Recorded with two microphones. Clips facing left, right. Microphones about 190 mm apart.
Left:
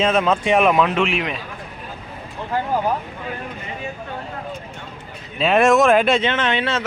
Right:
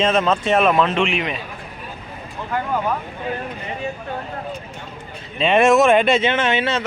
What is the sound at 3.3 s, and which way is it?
Speech, 30° right (ahead or behind).